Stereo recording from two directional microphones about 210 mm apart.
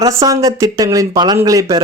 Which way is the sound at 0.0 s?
15° right (ahead or behind).